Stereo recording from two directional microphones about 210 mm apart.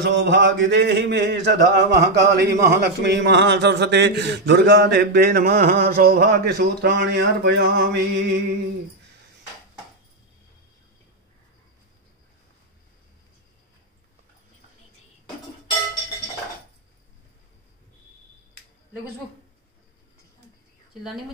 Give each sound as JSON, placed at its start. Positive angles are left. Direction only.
{"t": 0.0, "sound": "speech", "side_deg": -55}